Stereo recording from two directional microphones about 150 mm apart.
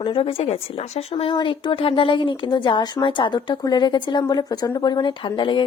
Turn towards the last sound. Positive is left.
turn(degrees=30)  # may be behind; listen again after turning